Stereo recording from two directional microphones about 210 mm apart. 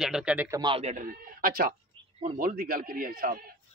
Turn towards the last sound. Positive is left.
turn(degrees=-40)  # may be behind; listen again after turning